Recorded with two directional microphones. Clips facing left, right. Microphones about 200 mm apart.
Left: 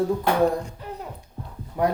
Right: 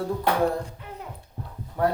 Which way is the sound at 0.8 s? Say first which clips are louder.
Left 5 dB; 35° left (ahead or behind).